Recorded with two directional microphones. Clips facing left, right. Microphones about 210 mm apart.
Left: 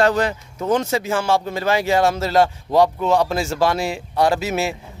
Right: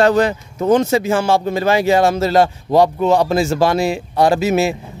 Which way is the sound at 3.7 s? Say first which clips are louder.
Right 5 dB; 15° right (ahead or behind).